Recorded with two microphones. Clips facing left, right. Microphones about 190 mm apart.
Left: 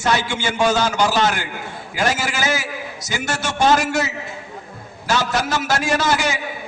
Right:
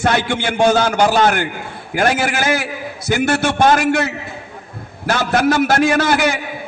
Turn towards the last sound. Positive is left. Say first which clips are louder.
# right 4 dB
turn(degrees=-60)  # may be behind; listen again after turning